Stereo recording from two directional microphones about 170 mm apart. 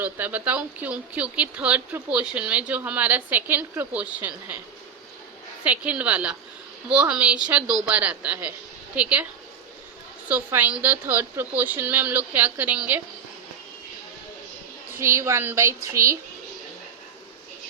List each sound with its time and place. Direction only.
0.0 s speech: 10° right (ahead or behind)
5.6 s speech: 10° right (ahead or behind)
10.2 s speech: 10° right (ahead or behind)
14.9 s speech: 15° right (ahead or behind)